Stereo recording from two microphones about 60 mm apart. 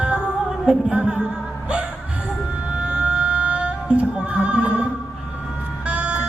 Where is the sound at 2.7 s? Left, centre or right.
Right.